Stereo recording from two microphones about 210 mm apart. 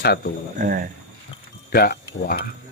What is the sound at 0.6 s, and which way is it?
Speech, 40° right (ahead or behind).